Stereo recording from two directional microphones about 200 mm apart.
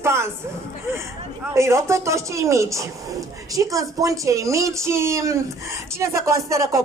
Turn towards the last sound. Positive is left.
turn(degrees=-15)  # may be behind; listen again after turning